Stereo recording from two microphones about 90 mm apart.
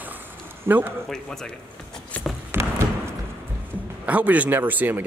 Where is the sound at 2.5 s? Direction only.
30° right (ahead or behind).